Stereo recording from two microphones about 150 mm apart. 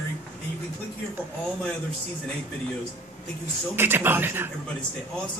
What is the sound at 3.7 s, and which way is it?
Speech, 15° right (ahead or behind).